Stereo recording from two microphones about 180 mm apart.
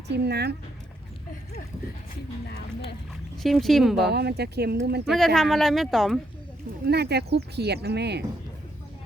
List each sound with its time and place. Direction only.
0.1 s speech: 65° right (ahead or behind)
3.4 s speech: centre (ahead or behind)
4.1 s speech: 65° right (ahead or behind)
5.0 s speech: centre (ahead or behind)
6.8 s speech: 65° right (ahead or behind)